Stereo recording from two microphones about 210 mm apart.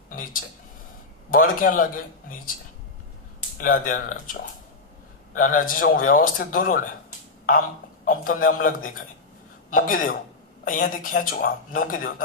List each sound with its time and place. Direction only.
1.3 s a man's voice: 40° left (ahead or behind)
3.6 s a man's voice: 40° left (ahead or behind)
5.3 s a man's voice: 40° left (ahead or behind)
8.0 s a man's voice: 40° left (ahead or behind)